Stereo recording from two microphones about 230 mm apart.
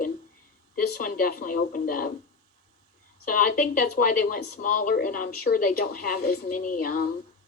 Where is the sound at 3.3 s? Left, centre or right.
Left.